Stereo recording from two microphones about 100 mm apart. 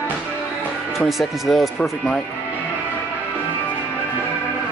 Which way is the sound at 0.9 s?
Centre (ahead or behind).